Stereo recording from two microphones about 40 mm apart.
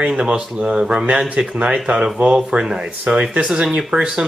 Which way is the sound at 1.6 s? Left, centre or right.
Right.